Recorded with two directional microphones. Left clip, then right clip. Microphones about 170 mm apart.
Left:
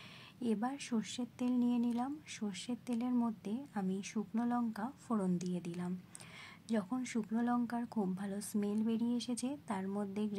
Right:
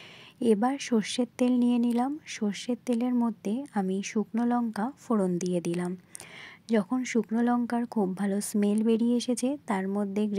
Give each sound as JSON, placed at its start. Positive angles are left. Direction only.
{"t": 0.4, "sound": "speech", "side_deg": -40}